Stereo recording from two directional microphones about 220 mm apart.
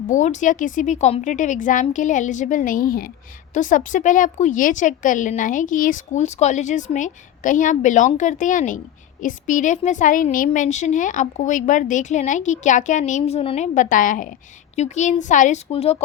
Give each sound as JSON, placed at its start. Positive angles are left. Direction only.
{"t": 0.1, "sound": "a woman's voice", "side_deg": 35}